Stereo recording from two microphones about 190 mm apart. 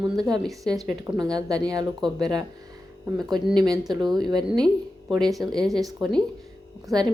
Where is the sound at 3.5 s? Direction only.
20° right (ahead or behind).